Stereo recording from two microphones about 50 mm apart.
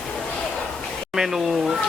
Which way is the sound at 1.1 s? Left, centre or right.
Centre.